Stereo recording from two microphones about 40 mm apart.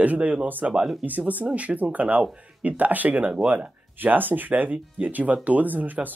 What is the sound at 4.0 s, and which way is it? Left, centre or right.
Speech, right.